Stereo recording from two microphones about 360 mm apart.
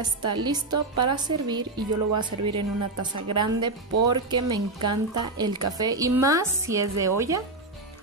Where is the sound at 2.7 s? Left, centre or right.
Right.